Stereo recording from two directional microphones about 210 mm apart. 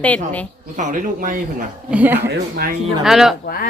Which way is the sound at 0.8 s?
40° right (ahead or behind).